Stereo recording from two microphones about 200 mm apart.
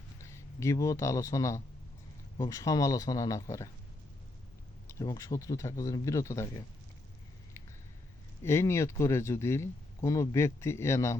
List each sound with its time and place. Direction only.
0.2 s speech: 15° left (ahead or behind)
4.9 s speech: 15° left (ahead or behind)
8.4 s speech: 15° left (ahead or behind)